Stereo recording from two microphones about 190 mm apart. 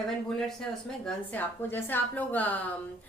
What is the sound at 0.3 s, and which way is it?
A woman's voice, centre (ahead or behind).